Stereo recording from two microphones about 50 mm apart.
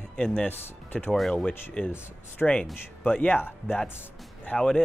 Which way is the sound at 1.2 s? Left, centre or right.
Centre.